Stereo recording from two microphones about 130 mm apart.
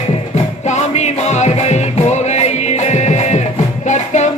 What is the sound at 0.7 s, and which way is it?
Music, 60° left (ahead or behind).